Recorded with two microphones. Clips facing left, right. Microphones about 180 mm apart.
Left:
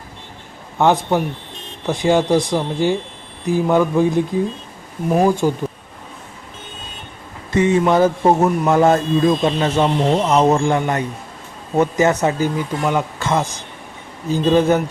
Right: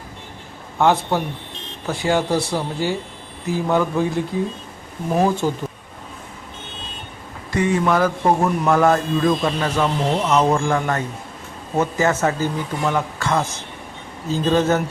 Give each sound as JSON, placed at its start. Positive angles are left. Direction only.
{"t": 0.8, "sound": "speech", "side_deg": 15}
{"t": 7.5, "sound": "a man's voice", "side_deg": 20}